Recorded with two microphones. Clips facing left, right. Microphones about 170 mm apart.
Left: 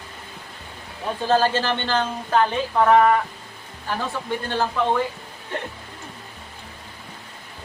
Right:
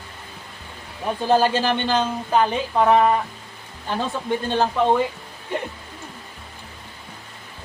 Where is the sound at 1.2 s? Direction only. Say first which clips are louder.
Right 1 dB; 15° right (ahead or behind).